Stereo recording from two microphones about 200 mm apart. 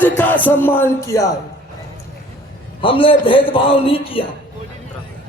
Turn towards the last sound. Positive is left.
turn(degrees=25)  # may be behind; listen again after turning